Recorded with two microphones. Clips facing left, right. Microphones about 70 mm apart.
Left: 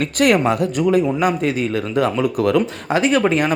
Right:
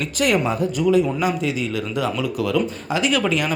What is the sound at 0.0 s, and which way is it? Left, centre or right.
A man's voice, left.